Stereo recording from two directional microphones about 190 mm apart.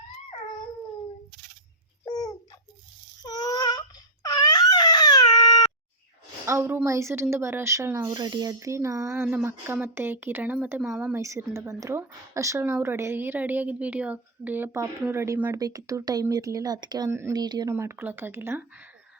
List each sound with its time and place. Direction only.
2.0 s a sound: 20° left (ahead or behind)
3.2 s wail: 20° left (ahead or behind)
6.4 s speech: 15° right (ahead or behind)